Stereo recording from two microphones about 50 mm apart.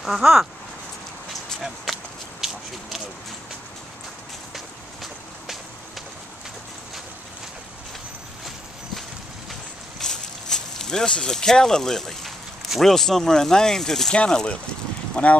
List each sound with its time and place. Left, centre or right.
0.0 s speech: centre
1.9 s walk: centre
2.4 s a sound: centre
4.6 s walk: centre
9.5 s a sound: centre
12.9 s speech: centre
14.1 s speech: left